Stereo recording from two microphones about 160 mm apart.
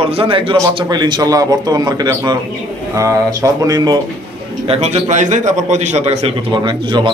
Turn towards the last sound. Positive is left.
turn(degrees=-30)  # may be behind; listen again after turning